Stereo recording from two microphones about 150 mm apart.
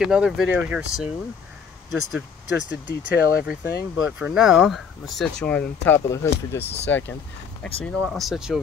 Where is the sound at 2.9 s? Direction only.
85° left.